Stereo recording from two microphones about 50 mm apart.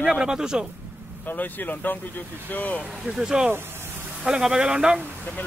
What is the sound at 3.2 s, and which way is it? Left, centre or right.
Speech, centre.